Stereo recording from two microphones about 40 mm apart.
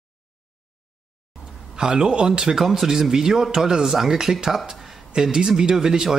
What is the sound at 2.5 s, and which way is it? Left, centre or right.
Speech, centre.